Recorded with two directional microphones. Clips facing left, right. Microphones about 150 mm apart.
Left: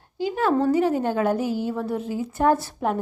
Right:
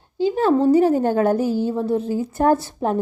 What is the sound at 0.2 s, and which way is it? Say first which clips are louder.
A woman's voice: right 4 dB; 30° right (ahead or behind).